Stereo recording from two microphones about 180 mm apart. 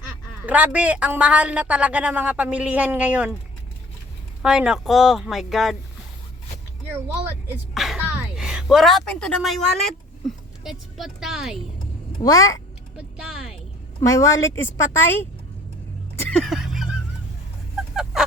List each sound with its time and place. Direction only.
0.4 s a woman's voice: 10° right (ahead or behind)
4.4 s speech: 5° right (ahead or behind)
7.7 s a woman's voice: centre (ahead or behind)
12.2 s a child's voice: 20° left (ahead or behind)
13.0 s speech: 5° right (ahead or behind)
14.1 s a woman's voice: 15° left (ahead or behind)
16.3 s a sound: centre (ahead or behind)
17.9 s fowl: 5° right (ahead or behind)